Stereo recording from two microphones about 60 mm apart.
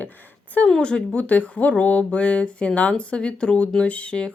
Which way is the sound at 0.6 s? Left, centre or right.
Centre.